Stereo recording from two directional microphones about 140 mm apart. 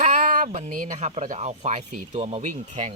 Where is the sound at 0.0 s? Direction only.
60° right (ahead or behind).